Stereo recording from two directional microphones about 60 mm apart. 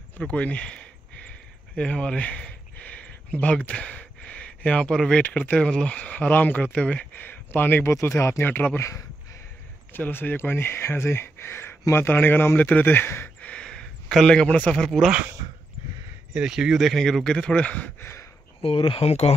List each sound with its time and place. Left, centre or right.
0.2 s a sound: left
5.2 s speech: left
7.2 s speech: left
9.9 s speech: left
13.5 s a sound: centre
14.1 s speech: centre
14.9 s speech: centre
16.3 s speech: centre; by 17.9 s left